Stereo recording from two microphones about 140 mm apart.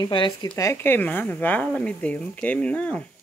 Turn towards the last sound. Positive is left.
turn(degrees=10)  # may be behind; listen again after turning